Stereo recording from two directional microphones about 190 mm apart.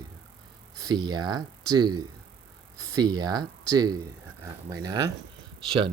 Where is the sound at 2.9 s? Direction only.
20° right (ahead or behind).